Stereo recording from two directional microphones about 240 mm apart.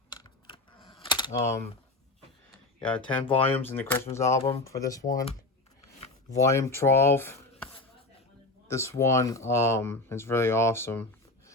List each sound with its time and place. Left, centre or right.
0.1 s typing: centre
2.5 s a sound: centre
3.4 s speech: centre
6.3 s speech: centre
8.6 s speech: centre